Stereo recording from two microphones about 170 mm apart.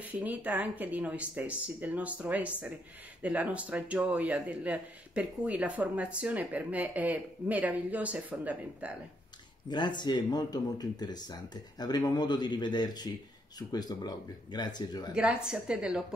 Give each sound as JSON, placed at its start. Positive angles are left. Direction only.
{"t": 0.0, "sound": "a man's voice", "side_deg": -10}
{"t": 9.7, "sound": "speech", "side_deg": 25}
{"t": 15.1, "sound": "a woman's voice", "side_deg": -5}